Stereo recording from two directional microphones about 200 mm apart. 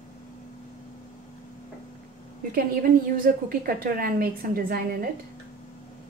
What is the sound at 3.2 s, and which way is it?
A woman's voice, 45° right (ahead or behind).